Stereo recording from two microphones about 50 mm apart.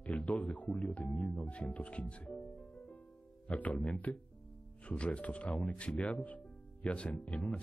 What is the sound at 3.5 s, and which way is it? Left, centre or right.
Speech, left.